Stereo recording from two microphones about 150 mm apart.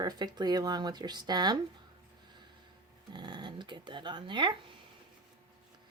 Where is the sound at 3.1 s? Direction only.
30° right (ahead or behind).